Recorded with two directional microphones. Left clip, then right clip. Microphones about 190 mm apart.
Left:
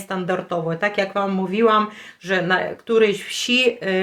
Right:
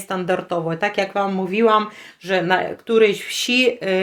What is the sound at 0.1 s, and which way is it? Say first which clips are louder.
Speech: right 2 dB; 25° right (ahead or behind).